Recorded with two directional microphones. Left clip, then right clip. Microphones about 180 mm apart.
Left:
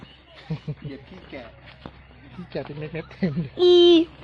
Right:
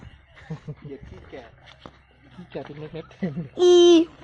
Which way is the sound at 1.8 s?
65° right (ahead or behind).